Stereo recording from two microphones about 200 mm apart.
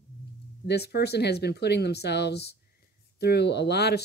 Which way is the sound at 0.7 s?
55° left (ahead or behind).